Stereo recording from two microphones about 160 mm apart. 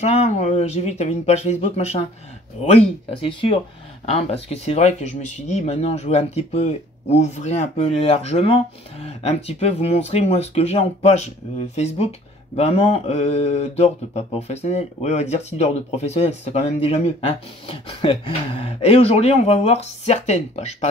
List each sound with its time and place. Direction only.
0.0 s speech: 45° left (ahead or behind)
2.6 s mantra: 40° left (ahead or behind)